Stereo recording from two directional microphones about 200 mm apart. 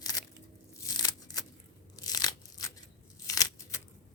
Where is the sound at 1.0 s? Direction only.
20° left (ahead or behind).